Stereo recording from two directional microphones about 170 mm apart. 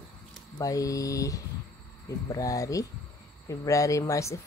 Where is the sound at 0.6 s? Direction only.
20° left (ahead or behind).